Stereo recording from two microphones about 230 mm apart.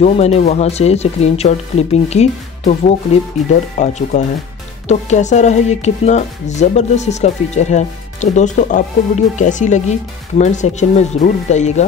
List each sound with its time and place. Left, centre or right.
0.0 s speech: left